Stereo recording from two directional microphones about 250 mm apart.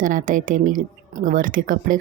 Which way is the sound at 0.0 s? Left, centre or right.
Right.